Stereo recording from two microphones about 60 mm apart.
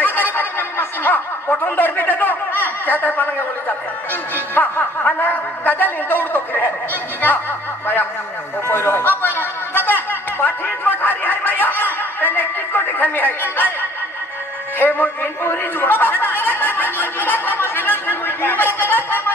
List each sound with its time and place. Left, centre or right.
0.0 s speech: left
8.6 s speech: left
14.8 s speech: left